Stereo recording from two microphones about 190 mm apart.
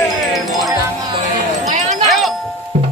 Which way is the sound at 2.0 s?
Centre (ahead or behind).